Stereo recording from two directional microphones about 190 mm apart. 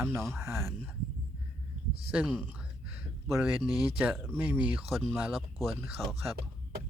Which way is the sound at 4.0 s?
5° right (ahead or behind).